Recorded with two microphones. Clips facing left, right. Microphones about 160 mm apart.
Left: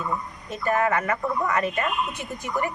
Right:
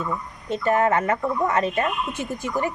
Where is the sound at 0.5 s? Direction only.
25° right (ahead or behind).